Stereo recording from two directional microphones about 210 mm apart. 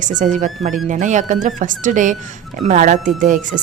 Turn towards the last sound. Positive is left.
turn(degrees=-40)  # may be behind; listen again after turning